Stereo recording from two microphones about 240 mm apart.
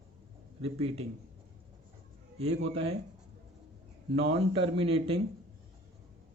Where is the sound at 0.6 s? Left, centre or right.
Right.